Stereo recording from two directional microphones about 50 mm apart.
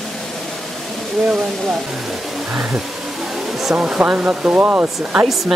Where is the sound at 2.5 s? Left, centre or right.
Right.